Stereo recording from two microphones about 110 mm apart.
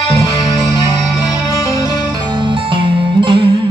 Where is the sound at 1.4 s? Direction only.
30° left (ahead or behind).